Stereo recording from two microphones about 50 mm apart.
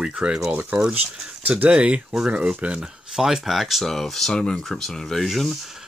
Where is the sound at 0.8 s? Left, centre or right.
Right.